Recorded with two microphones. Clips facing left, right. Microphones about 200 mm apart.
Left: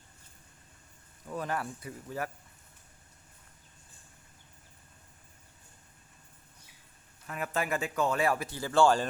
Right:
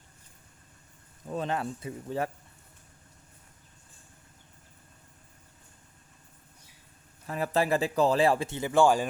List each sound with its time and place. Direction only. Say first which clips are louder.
1.3 s speech: right 4 dB; 25° right (ahead or behind)
7.3 s speech: right 6 dB; 35° right (ahead or behind); by 9.0 s 15° right (ahead or behind)